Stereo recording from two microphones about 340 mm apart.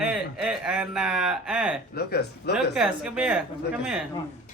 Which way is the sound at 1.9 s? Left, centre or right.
Left.